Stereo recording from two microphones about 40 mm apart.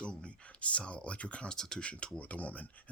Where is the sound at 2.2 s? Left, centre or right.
Left.